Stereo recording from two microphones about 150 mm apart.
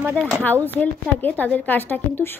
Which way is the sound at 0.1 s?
5° left (ahead or behind).